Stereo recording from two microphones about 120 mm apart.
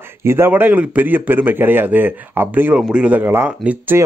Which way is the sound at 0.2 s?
20° right (ahead or behind).